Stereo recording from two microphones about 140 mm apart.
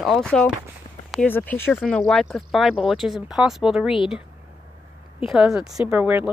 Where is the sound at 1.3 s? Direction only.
15° left (ahead or behind); by 4.2 s 5° right (ahead or behind).